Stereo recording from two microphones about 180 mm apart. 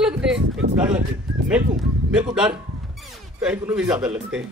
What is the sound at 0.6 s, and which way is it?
Speech, 65° right (ahead or behind).